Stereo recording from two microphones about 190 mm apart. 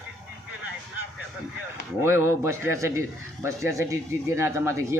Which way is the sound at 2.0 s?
15° right (ahead or behind).